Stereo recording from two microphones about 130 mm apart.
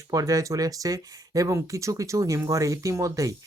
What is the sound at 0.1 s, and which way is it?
Speech, 25° right (ahead or behind).